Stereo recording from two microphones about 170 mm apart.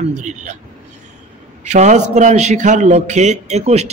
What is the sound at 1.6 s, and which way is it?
A man's voice, 45° right (ahead or behind).